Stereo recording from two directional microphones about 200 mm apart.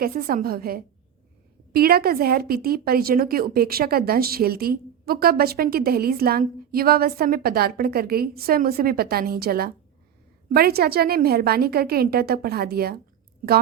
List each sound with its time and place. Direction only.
0.0 s a woman's voice: 45° right (ahead or behind)